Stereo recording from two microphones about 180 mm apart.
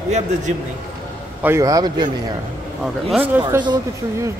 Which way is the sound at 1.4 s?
15° right (ahead or behind).